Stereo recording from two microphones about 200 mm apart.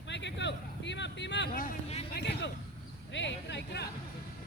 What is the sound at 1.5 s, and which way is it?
Speech, 35° left (ahead or behind).